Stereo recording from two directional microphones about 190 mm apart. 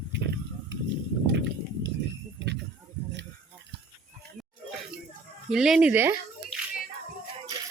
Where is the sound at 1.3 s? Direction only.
65° right (ahead or behind).